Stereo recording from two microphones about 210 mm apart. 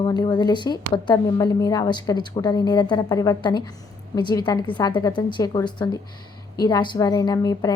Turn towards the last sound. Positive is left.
turn(degrees=20)  # may be behind; listen again after turning